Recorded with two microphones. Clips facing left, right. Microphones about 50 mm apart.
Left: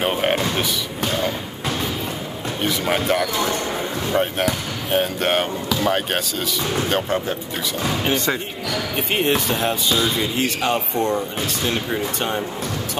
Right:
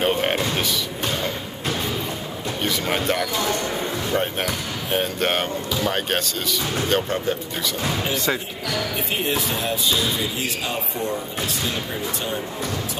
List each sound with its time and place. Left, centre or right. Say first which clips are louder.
0.0 s music: left 1 dB; centre
2.6 s speech: left 2 dB; centre
9.1 s speech: left 6 dB; left